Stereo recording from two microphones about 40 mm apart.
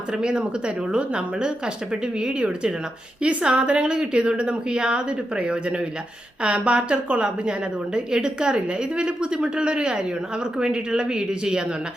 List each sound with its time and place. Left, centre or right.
0.1 s a woman's voice: right
3.5 s a woman's voice: right